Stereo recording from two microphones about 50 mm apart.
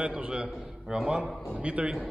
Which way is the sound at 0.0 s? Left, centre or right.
Right.